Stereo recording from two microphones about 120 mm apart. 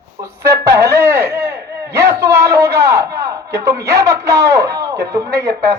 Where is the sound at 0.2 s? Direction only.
25° right (ahead or behind).